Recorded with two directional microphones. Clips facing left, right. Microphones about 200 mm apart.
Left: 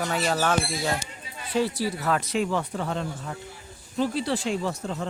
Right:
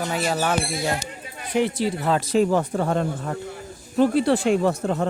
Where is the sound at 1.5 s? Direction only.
20° right (ahead or behind).